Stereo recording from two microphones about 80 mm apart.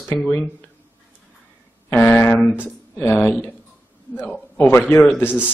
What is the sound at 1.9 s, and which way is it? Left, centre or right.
Speech, left.